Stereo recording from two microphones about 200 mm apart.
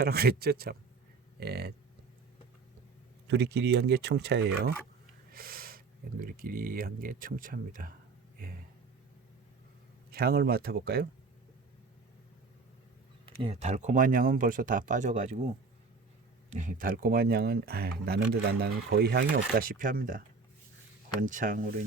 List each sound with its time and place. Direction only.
0.0 s speech: 50° right (ahead or behind)
3.2 s speech: 60° right (ahead or behind)
10.1 s speech: 50° right (ahead or behind)
13.2 s speech: 30° right (ahead or behind)
16.5 s speech: 40° right (ahead or behind)